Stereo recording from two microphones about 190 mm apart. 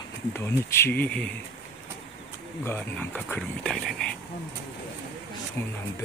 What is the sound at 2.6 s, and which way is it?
Speech, 10° left (ahead or behind).